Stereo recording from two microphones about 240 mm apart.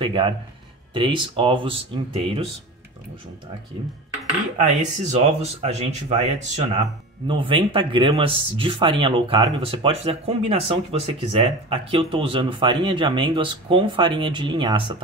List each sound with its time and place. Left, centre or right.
0.0 s speech: right
4.6 s speech: right